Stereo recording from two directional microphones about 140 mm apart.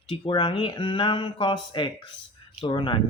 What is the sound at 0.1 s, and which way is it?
Speech, 35° left (ahead or behind).